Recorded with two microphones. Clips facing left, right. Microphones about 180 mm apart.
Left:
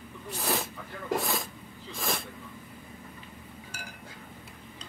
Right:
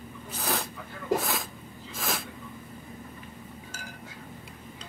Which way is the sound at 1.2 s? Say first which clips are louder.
Even; centre (ahead or behind).